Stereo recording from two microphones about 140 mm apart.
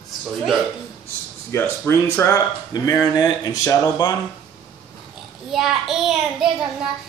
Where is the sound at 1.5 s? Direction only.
20° left (ahead or behind).